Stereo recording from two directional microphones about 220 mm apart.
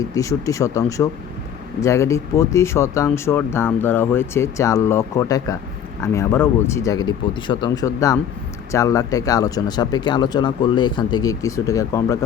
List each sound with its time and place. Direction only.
0.0 s speech: 15° left (ahead or behind)